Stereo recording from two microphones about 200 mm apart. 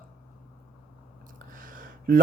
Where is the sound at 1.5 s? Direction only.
45° right (ahead or behind).